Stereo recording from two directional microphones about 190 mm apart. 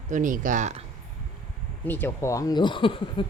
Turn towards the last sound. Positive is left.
turn(degrees=25)  # may be behind; listen again after turning